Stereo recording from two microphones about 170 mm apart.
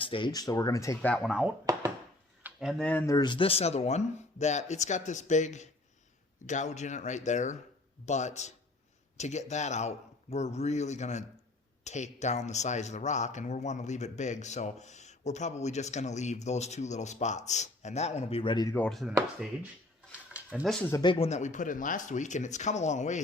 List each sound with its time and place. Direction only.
0.0 s speech: 30° left (ahead or behind)
1.1 s speech: centre (ahead or behind)
2.4 s a sound: centre (ahead or behind)
3.1 s speech: 25° left (ahead or behind)
18.7 s speech: 5° left (ahead or behind)
20.3 s a sound: 10° right (ahead or behind)
20.7 s speech: 5° left (ahead or behind)
20.9 s speech: 30° left (ahead or behind)
21.2 s speech: 45° left (ahead or behind)